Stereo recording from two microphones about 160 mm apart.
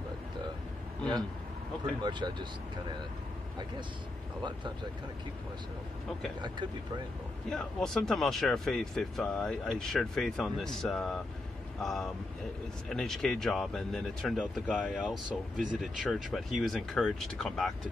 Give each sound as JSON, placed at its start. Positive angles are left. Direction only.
{"t": 2.0, "sound": "speech", "side_deg": -25}
{"t": 4.4, "sound": "speech", "side_deg": -30}
{"t": 7.4, "sound": "speech", "side_deg": 5}
{"t": 15.5, "sound": "speech", "side_deg": -55}
{"t": 15.8, "sound": "speech", "side_deg": 0}